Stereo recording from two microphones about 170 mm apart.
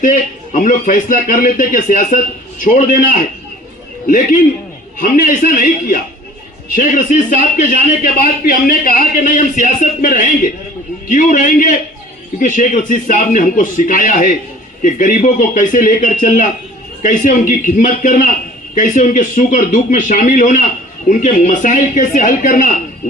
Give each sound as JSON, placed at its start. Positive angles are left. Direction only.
{"t": 0.0, "sound": "a man's voice", "side_deg": 50}